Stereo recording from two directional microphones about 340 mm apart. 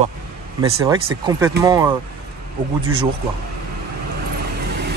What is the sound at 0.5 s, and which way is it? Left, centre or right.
Speech, centre.